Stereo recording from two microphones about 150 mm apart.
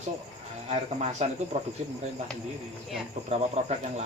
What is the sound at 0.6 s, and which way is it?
Speech, 45° right (ahead or behind).